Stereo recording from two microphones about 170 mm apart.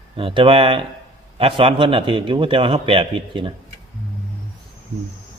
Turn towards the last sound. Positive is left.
turn(degrees=-30)  # may be behind; listen again after turning